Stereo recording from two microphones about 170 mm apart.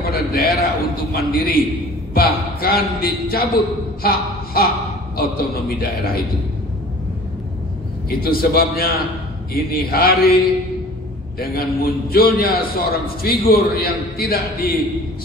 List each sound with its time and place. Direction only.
0.0 s a sound: 65° left (ahead or behind)
1.1 s a man's voice: 60° left (ahead or behind)
5.8 s a man's voice: 60° left (ahead or behind)
8.1 s a man's voice: 60° left (ahead or behind)